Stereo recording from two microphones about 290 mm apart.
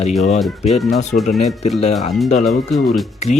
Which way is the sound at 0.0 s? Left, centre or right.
Left.